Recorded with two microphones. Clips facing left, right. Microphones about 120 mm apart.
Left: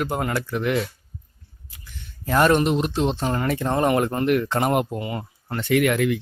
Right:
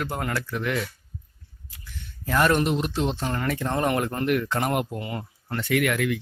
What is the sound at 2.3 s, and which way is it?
Speech, 25° left (ahead or behind).